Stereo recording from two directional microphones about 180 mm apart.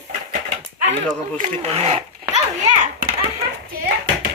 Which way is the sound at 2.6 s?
40° right (ahead or behind).